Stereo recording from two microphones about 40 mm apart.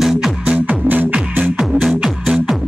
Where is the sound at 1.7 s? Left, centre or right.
Right.